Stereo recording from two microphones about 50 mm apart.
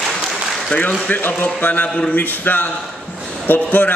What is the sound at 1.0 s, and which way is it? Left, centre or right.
A man's voice, left.